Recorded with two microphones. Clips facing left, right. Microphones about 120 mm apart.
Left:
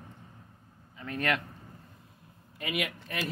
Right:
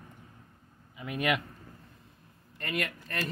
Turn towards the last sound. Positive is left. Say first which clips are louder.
# even
turn(degrees=5)  # may be behind; listen again after turning